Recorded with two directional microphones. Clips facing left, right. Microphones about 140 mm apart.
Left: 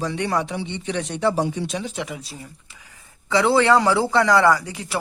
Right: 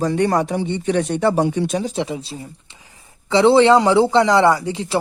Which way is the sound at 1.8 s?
35° right (ahead or behind).